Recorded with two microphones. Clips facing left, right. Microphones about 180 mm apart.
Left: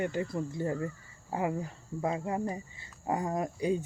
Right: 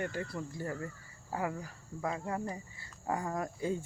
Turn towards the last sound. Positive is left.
turn(degrees=20)  # may be behind; listen again after turning